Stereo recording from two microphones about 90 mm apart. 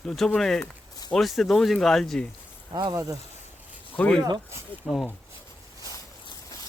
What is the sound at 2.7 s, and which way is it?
Speech, 55° right (ahead or behind).